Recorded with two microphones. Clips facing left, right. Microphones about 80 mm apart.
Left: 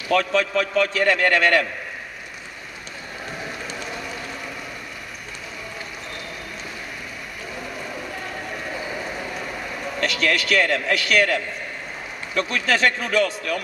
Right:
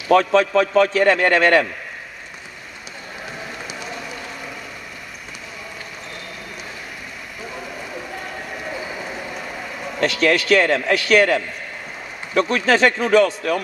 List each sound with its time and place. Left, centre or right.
0.1 s a man's voice: right
10.2 s a man's voice: right